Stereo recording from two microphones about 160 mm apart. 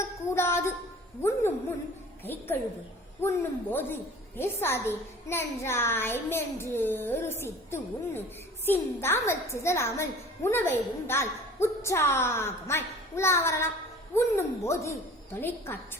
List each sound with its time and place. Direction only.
0.3 s a woman's voice: 15° left (ahead or behind)
2.2 s a woman's voice: 15° left (ahead or behind)